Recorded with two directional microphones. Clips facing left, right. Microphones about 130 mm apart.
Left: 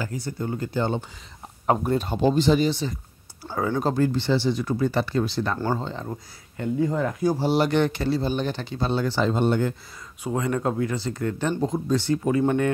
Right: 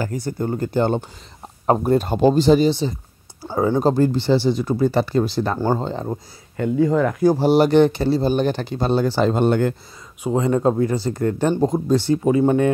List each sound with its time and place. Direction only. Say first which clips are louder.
0.0 s speech: right 6 dB; 45° right (ahead or behind)
1.7 s speech: right 5 dB; 40° right (ahead or behind)
6.5 s speech: right 6 dB; 90° right
7.5 s speech: right 7 dB; 35° right (ahead or behind)
9.2 s speech: right 3 dB; 60° right (ahead or behind)
10.2 s speech: right 7 dB; 25° right (ahead or behind); by 12.1 s 40° right (ahead or behind)
12.1 s speech: right 5 dB; 25° right (ahead or behind)